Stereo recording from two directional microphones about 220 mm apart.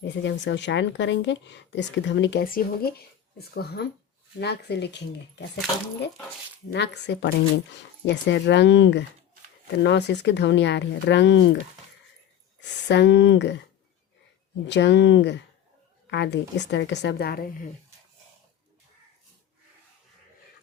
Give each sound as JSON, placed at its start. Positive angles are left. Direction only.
{"t": 0.0, "sound": "a woman's voice", "side_deg": 55}
{"t": 6.7, "sound": "a woman's voice", "side_deg": 50}
{"t": 12.5, "sound": "a woman's voice", "side_deg": 50}
{"t": 14.7, "sound": "a woman's voice", "side_deg": 50}